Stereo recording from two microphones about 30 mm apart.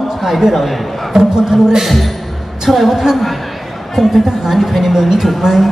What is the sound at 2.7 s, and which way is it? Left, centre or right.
A woman's voice, centre.